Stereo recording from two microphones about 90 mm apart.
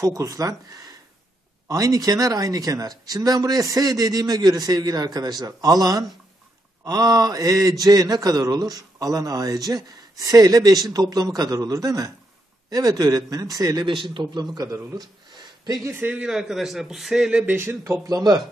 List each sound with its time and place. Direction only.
0.0 s speech: 35° right (ahead or behind)
15.0 s a sound: 50° right (ahead or behind)
15.9 s a man's voice: 25° right (ahead or behind)
16.2 s a man's voice: 5° right (ahead or behind)
17.6 s speech: 35° right (ahead or behind)